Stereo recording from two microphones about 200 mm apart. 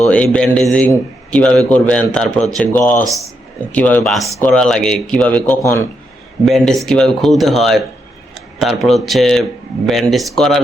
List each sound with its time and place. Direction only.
0.0 s speech: 5° left (ahead or behind)